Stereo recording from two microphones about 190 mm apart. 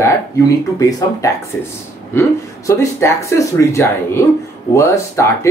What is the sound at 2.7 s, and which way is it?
Speech, 15° left (ahead or behind).